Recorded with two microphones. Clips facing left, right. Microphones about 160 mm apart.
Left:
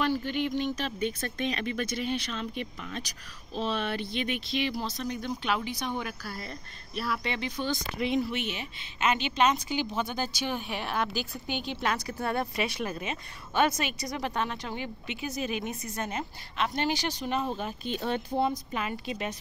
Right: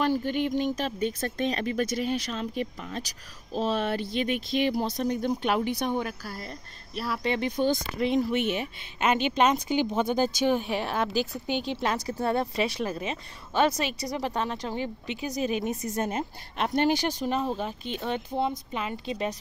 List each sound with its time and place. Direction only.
0.0 s speech: 45° right (ahead or behind)
5.9 s speech: 35° right (ahead or behind)
7.3 s speech: 50° right (ahead or behind)
17.6 s a woman's voice: 25° right (ahead or behind)